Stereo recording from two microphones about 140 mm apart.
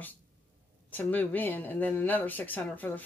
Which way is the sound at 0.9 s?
10° left (ahead or behind).